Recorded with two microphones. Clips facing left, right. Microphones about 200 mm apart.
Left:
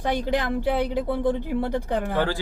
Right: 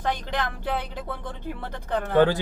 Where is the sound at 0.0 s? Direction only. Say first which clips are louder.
Left 4 dB; 10° left (ahead or behind).